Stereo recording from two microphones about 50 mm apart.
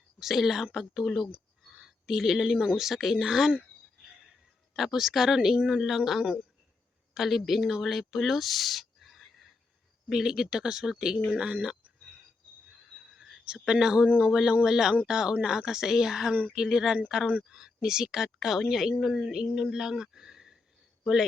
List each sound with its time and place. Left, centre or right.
0.2 s speech: centre
1.6 s a sound: centre
2.7 s speech: centre
4.7 s speech: centre
13.1 s a sound: centre
13.7 s speech: centre